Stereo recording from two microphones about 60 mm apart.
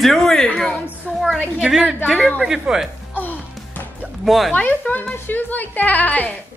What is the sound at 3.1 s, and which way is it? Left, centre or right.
Music, left.